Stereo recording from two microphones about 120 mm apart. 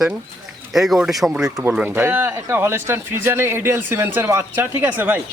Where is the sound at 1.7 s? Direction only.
15° right (ahead or behind).